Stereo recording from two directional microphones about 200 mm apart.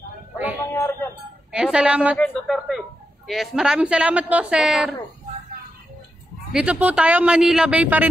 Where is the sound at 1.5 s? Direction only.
5° right (ahead or behind).